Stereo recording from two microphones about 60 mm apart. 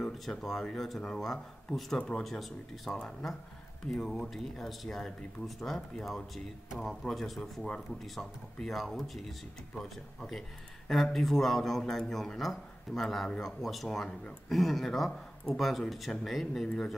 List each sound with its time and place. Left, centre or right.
0.0 s speech: centre
2.2 s speech: centre
10.9 s speech: centre
16.6 s speech: centre